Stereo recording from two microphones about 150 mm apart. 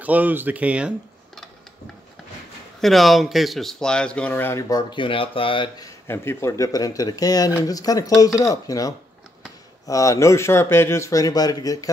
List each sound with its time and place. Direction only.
0.0 s speech: 10° right (ahead or behind)
2.8 s a man's voice: centre (ahead or behind); by 5.9 s 30° left (ahead or behind)
6.0 s speech: 15° left (ahead or behind)